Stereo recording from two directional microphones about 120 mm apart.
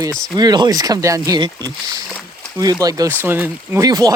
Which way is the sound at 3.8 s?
30° right (ahead or behind).